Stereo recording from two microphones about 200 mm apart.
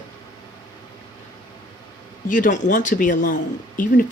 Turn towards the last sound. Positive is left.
turn(degrees=45)  # may be behind; listen again after turning